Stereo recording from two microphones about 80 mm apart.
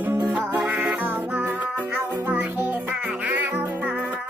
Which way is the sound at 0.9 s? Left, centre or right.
Right.